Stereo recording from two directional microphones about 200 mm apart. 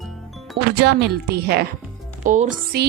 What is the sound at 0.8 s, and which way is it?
Speech, 55° right (ahead or behind).